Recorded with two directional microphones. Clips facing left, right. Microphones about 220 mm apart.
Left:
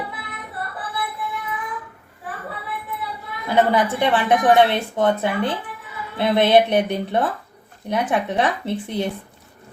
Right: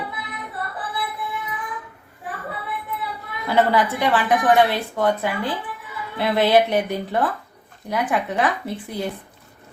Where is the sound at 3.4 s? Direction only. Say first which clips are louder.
Left 1 dB; 15° left (ahead or behind).